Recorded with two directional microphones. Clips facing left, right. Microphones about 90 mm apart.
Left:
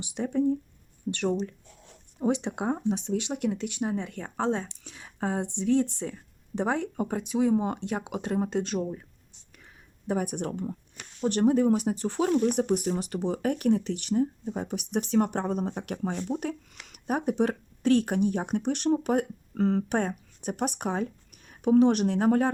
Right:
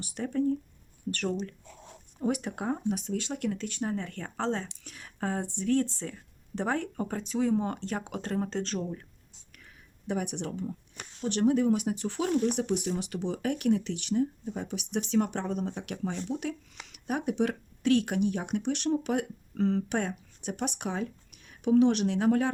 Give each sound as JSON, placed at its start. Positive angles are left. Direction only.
{"t": 0.0, "sound": "speech", "side_deg": 15}
{"t": 10.1, "sound": "speech", "side_deg": 40}